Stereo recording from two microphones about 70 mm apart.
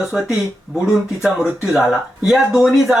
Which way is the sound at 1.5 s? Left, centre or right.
Centre.